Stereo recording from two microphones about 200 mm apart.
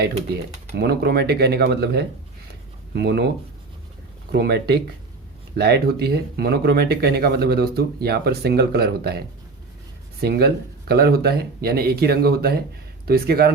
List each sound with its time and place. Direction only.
0.8 s speech: 50° right (ahead or behind)
4.3 s speech: 55° right (ahead or behind)